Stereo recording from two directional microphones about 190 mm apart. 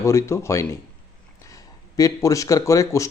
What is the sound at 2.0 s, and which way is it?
Speech, 20° left (ahead or behind).